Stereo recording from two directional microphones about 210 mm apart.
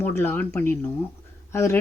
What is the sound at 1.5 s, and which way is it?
Speech, 10° left (ahead or behind).